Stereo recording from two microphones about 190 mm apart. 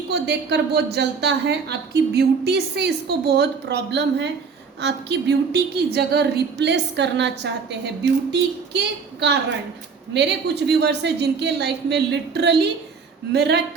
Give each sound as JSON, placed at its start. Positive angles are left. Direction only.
{"t": 0.1, "sound": "speech", "side_deg": -60}